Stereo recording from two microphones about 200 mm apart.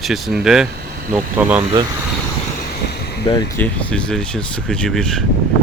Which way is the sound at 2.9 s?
55° left (ahead or behind).